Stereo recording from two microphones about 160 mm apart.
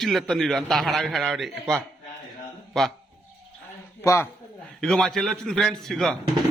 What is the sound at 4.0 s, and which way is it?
Speech, 15° left (ahead or behind).